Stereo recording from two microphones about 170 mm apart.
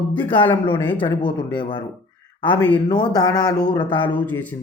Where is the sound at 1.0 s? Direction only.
25° left (ahead or behind).